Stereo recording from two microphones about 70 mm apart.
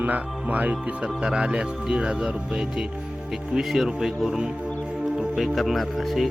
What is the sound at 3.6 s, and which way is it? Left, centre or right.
Speech, centre.